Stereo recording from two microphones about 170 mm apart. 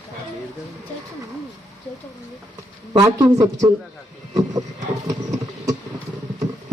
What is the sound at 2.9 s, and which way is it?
Speech, 20° right (ahead or behind).